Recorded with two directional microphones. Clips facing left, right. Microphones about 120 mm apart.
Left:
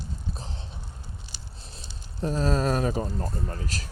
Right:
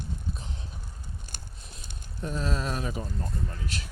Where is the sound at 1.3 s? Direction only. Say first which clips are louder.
Right 1 dB; 50° right (ahead or behind).